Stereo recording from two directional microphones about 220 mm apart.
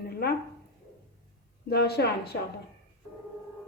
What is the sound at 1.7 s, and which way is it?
Speech, 45° left (ahead or behind).